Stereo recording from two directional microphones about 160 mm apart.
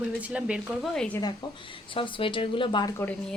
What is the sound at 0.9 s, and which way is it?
Speech, 5° left (ahead or behind).